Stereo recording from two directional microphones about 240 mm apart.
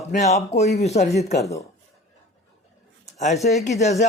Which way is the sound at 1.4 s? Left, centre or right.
Centre.